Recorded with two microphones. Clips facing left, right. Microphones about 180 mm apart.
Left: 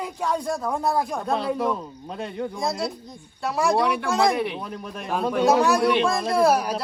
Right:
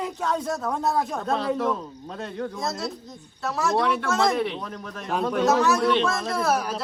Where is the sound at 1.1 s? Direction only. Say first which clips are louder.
Even; 10° left (ahead or behind).